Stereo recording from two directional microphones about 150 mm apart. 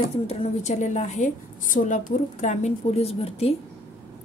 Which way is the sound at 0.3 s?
45° left (ahead or behind).